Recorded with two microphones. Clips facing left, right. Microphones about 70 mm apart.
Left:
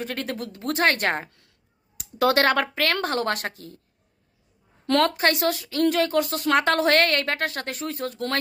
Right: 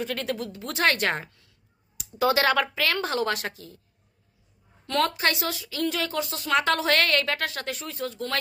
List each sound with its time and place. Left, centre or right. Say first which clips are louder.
0.0 s a woman's voice: right 1 dB; left
1.3 s a sound: left 1 dB; left
2.1 s speech: left 2 dB; left
4.9 s speech: left 4 dB; left